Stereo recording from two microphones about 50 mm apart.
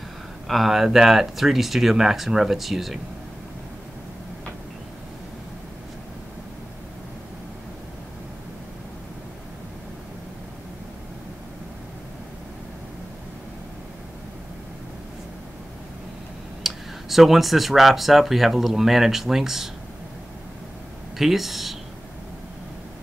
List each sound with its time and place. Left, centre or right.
0.5 s speech: centre
16.6 s speech: centre
21.2 s speech: centre